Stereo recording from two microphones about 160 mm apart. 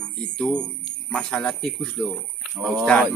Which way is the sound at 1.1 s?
Centre (ahead or behind).